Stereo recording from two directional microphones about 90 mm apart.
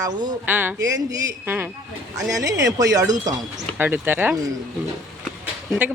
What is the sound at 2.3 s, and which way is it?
Speech, 40° right (ahead or behind).